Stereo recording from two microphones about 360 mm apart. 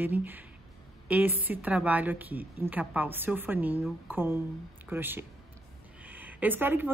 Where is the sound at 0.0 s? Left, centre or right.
Centre.